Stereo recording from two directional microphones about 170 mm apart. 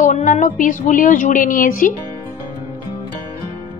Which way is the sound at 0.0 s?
50° left (ahead or behind).